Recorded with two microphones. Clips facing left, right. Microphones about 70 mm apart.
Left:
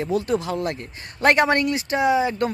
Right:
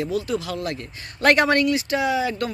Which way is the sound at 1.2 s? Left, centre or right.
Centre.